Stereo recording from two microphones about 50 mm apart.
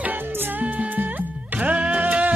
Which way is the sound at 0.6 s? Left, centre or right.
Right.